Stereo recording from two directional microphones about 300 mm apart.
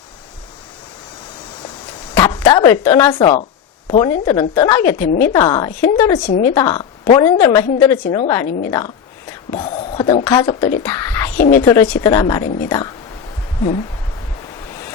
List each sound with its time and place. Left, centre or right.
2.1 s a sound: centre
2.8 s a woman's voice: centre
4.9 s a woman's voice: left
5.3 s a woman's voice: centre
6.1 s speech: left
6.5 s a woman's voice: centre
8.4 s speech: left
9.5 s a woman's voice: centre